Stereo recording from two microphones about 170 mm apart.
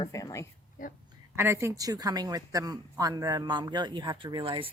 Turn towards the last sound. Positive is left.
turn(degrees=-30)  # may be behind; listen again after turning